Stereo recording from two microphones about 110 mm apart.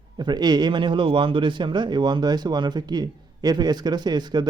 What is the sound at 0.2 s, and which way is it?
Speech, 40° right (ahead or behind).